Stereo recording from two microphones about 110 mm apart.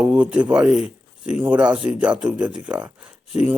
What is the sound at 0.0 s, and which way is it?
Speech, 10° right (ahead or behind).